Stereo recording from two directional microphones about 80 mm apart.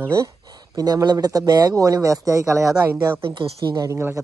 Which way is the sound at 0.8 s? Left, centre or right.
Right.